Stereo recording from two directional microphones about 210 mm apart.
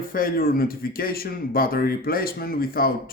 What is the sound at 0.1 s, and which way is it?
Speech, 45° left (ahead or behind).